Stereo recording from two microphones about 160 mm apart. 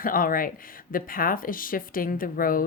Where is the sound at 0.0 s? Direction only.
60° left (ahead or behind).